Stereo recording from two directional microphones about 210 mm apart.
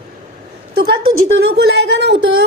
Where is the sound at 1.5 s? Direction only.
55° right (ahead or behind).